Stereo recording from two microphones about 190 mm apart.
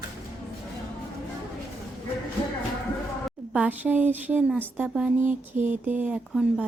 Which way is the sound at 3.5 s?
10° right (ahead or behind).